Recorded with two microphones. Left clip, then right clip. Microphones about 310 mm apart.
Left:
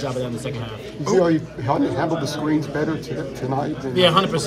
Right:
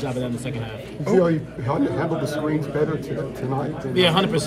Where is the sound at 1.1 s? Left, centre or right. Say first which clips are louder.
Left 1 dB; left.